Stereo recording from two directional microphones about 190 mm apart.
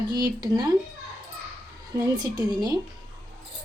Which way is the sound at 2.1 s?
20° right (ahead or behind).